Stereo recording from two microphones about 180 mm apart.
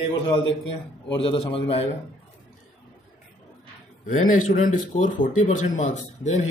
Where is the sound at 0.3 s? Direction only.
30° left (ahead or behind).